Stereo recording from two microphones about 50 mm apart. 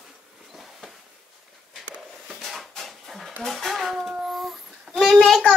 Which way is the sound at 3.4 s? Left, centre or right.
Centre.